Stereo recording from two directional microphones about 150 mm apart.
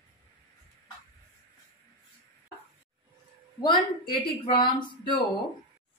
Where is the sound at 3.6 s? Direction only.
30° left (ahead or behind).